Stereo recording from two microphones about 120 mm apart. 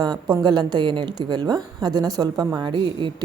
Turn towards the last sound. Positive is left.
turn(degrees=-40)  # may be behind; listen again after turning